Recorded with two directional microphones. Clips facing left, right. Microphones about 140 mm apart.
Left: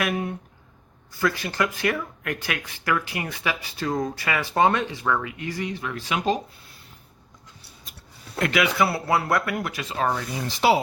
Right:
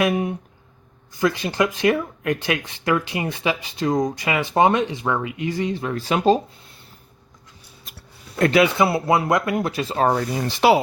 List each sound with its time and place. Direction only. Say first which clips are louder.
0.0 s speech: right 6 dB; 20° right (ahead or behind)
8.4 s speech: right 5 dB; 30° right (ahead or behind)
10.5 s speech: right 4 dB; 65° right (ahead or behind)